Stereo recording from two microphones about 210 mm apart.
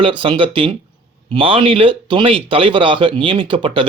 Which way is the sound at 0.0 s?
25° right (ahead or behind).